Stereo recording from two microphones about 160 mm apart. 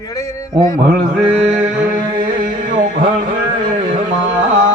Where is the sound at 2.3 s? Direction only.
55° right (ahead or behind).